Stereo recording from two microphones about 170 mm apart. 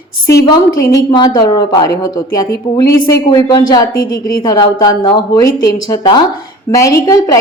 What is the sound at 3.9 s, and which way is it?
Speech, 60° left (ahead or behind).